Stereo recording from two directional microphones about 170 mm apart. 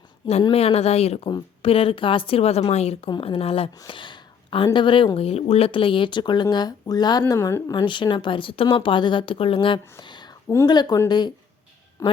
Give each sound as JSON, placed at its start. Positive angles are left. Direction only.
{"t": 0.5, "sound": "a woman's voice", "side_deg": 35}